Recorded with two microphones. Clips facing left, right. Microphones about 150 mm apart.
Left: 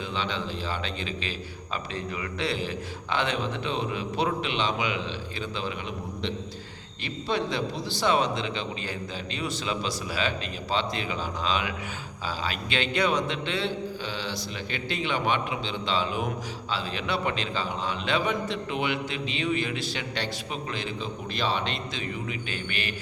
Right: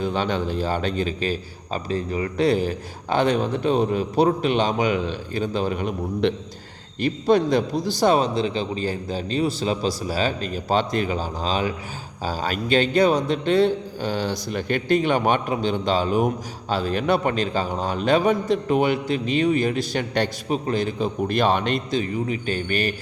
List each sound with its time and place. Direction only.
0.0 s a man's voice: 45° right (ahead or behind)